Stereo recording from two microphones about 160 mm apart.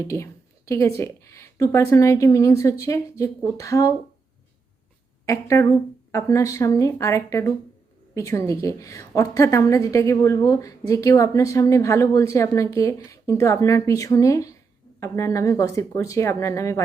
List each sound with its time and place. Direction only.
0.1 s a woman's voice: 20° left (ahead or behind)
5.2 s a woman's voice: 20° left (ahead or behind)